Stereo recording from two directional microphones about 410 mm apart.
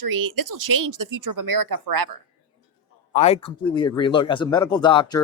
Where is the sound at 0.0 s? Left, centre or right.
Right.